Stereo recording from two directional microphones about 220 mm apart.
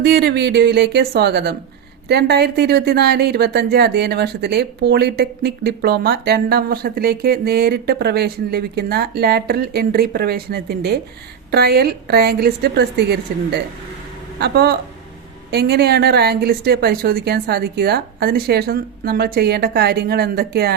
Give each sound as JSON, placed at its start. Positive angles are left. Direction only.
{"t": 0.0, "sound": "speech", "side_deg": -45}